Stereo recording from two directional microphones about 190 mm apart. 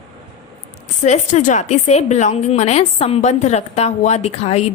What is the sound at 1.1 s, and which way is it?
A woman's voice, 40° left (ahead or behind).